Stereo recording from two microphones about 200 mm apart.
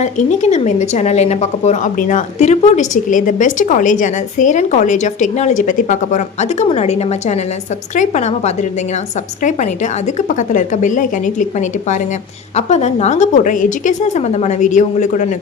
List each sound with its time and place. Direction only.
0.0 s a woman's voice: 35° left (ahead or behind)